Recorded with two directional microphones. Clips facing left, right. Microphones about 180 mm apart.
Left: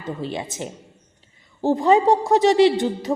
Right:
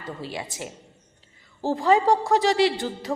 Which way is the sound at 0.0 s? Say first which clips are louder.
Left 5 dB; 20° left (ahead or behind).